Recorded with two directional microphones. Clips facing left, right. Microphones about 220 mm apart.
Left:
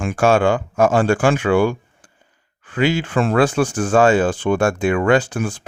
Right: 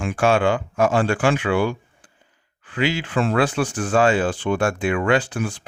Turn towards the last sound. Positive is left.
turn(degrees=45)  # may be behind; listen again after turning